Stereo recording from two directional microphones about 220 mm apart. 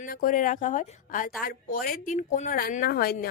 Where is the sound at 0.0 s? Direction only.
40° left (ahead or behind).